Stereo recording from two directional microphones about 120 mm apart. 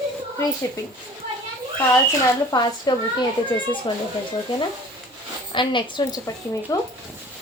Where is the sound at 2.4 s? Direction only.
35° left (ahead or behind).